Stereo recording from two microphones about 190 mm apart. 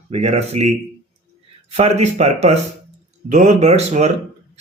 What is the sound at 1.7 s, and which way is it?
Speech, 35° right (ahead or behind).